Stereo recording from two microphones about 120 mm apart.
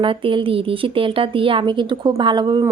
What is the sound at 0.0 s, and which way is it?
Speech, 45° right (ahead or behind).